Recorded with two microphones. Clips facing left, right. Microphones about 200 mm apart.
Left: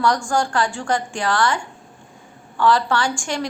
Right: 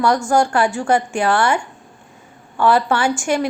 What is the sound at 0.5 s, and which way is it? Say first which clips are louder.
A woman's voice: right 5 dB; 10° right (ahead or behind).